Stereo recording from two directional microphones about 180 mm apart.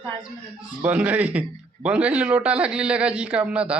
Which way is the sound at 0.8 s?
10° right (ahead or behind).